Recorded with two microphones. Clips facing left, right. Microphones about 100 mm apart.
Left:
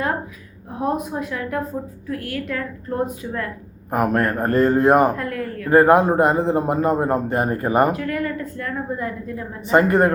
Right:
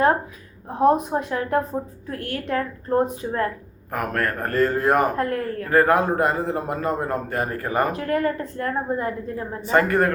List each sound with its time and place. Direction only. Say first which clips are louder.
0.8 s a woman's voice: right 5 dB; 35° right (ahead or behind)
3.9 s a man's voice: left 5 dB; 25° left (ahead or behind)
5.1 s a woman's voice: right 2 dB; 35° right (ahead or behind)
5.6 s a man's voice: left 5 dB; 25° left (ahead or behind)
7.9 s a woman's voice: right 2 dB; 35° right (ahead or behind)
9.7 s a man's voice: left 3 dB; 25° left (ahead or behind)